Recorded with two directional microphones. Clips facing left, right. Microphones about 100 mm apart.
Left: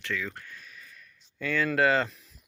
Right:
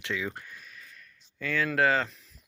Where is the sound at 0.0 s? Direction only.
20° right (ahead or behind).